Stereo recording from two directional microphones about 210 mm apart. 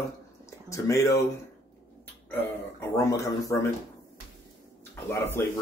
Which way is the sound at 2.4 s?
10° left (ahead or behind).